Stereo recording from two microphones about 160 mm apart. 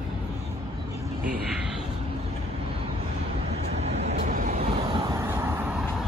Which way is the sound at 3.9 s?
45° right (ahead or behind).